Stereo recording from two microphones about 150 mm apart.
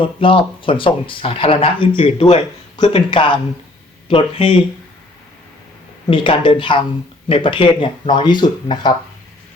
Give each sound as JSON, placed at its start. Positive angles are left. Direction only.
{"t": 0.0, "sound": "speech", "side_deg": 35}
{"t": 6.1, "sound": "speech", "side_deg": 35}